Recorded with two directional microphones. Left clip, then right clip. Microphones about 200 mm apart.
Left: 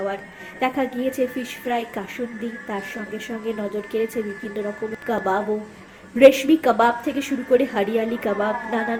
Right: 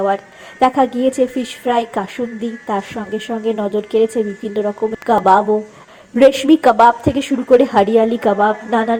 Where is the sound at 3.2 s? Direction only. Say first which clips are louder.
Right 10 dB; 20° right (ahead or behind).